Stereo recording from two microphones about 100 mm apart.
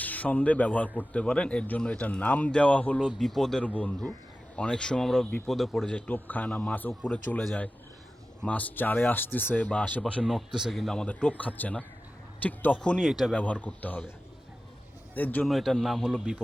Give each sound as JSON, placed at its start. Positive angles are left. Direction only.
{"t": 0.0, "sound": "speech", "side_deg": 15}
{"t": 3.2, "sound": "a man's voice", "side_deg": 0}
{"t": 6.1, "sound": "speech", "side_deg": 15}
{"t": 10.2, "sound": "speech", "side_deg": -5}
{"t": 13.4, "sound": "speech", "side_deg": 10}
{"t": 15.1, "sound": "a man's voice", "side_deg": 20}
{"t": 15.4, "sound": "a man's voice", "side_deg": 0}